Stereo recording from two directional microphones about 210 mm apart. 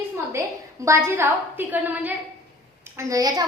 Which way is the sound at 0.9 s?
15° right (ahead or behind).